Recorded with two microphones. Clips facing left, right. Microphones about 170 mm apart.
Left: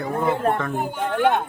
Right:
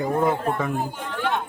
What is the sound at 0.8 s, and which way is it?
Speech, 55° left (ahead or behind).